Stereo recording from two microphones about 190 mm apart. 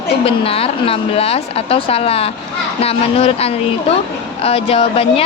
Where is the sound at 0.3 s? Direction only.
30° left (ahead or behind).